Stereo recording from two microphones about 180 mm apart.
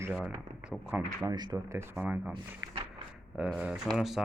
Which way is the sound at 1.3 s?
20° right (ahead or behind).